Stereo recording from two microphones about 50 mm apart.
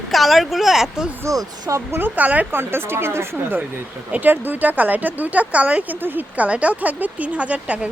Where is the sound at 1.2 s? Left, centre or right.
Right.